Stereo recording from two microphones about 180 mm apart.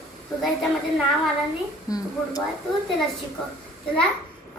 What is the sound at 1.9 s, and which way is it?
Speech, 20° left (ahead or behind).